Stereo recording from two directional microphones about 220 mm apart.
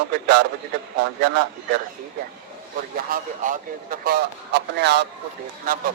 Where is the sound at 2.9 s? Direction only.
40° right (ahead or behind).